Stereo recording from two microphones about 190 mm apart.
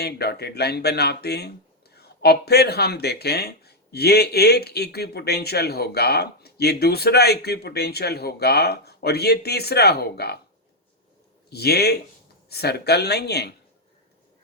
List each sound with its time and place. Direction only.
0.0 s speech: 60° left (ahead or behind)
11.4 s speech: 55° left (ahead or behind)